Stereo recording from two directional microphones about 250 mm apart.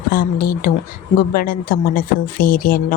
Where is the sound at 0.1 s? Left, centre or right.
Left.